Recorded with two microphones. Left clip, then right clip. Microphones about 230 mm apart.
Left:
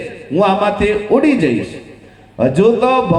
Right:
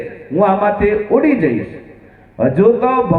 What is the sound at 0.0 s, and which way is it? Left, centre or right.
A man's voice, left.